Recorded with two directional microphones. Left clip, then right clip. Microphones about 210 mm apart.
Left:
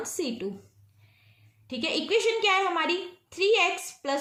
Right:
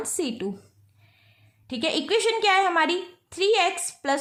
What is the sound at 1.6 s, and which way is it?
A woman's voice, 45° right (ahead or behind).